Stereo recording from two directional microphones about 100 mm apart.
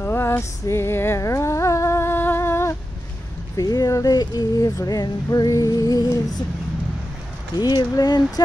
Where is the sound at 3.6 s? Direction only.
40° left (ahead or behind).